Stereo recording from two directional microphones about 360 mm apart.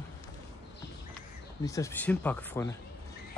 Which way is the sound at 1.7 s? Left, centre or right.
Centre.